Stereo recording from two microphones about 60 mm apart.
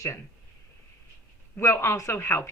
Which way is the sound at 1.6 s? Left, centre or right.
Left.